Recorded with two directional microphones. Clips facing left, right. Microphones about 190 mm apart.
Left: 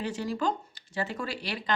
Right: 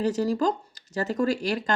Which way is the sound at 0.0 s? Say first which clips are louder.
Right 6 dB; 40° right (ahead or behind).